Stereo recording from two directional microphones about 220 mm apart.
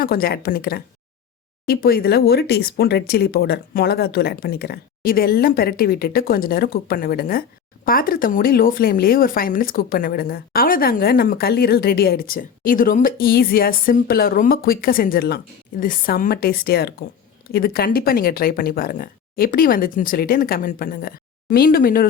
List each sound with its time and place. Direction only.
0.0 s speech: 40° left (ahead or behind)